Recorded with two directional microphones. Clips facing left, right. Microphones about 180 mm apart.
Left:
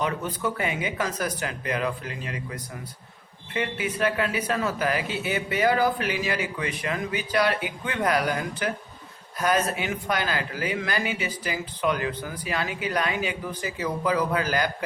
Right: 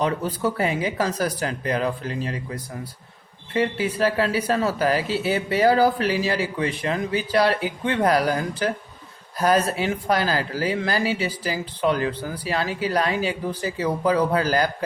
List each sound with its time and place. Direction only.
0.0 s speech: 35° right (ahead or behind)